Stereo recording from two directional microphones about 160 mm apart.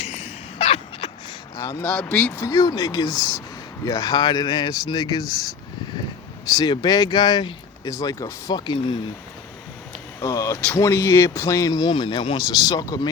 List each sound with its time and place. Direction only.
0.0 s a sound: 40° left (ahead or behind)
1.5 s speech: 15° left (ahead or behind)
1.9 s speech: 5° left (ahead or behind); by 5.2 s 25° left (ahead or behind)
6.6 s speech: 25° left (ahead or behind)
10.2 s speech: 20° left (ahead or behind)